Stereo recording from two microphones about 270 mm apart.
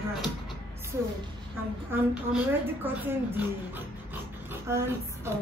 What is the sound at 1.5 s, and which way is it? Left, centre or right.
A woman's voice, centre.